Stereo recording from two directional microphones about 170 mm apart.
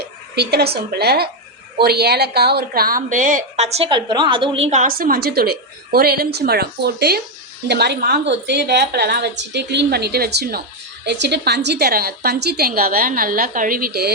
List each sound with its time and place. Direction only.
0.0 s a woman's voice: 70° right (ahead or behind)
11.0 s a woman's voice: 85° right; by 14.1 s 65° right (ahead or behind)